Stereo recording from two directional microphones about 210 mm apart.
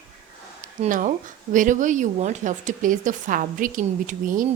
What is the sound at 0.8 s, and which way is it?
Speech, 35° right (ahead or behind).